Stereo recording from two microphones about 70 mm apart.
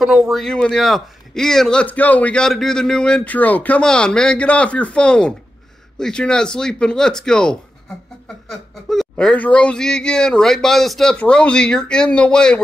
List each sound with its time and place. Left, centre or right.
0.3 s speech: centre
1.9 s speech: left
2.3 s speech: centre
3.3 s speech: left
3.8 s speech: centre
11.1 s speech: centre